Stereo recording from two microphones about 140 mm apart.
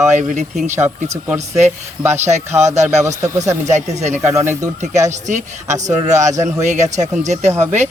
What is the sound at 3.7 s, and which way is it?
Speech, 55° right (ahead or behind).